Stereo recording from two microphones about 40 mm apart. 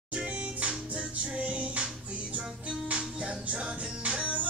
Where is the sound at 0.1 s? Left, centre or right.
Right.